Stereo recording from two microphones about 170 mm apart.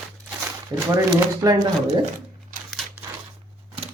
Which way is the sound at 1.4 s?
20° right (ahead or behind).